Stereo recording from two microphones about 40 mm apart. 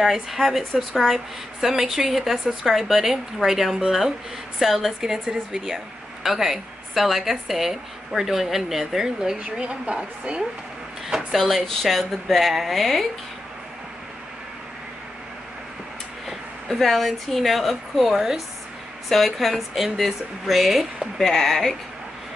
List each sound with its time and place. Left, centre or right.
0.0 s a woman's voice: centre
9.4 s a woman's voice: right
11.3 s speech: centre
16.6 s speech: centre
18.0 s a woman's voice: centre
19.0 s speech: centre